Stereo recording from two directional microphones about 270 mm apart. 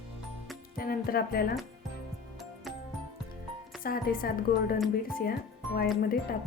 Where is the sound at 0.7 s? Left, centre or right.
Left.